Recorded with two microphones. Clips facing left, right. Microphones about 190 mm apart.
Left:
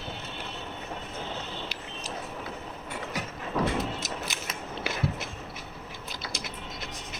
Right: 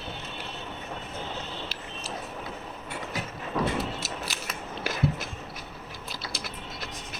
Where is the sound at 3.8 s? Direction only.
20° left (ahead or behind).